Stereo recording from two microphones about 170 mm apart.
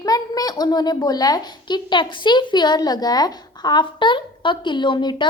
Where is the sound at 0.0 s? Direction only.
20° left (ahead or behind).